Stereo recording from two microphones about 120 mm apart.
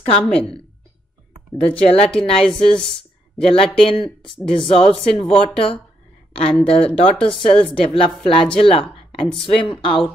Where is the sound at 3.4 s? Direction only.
50° left (ahead or behind).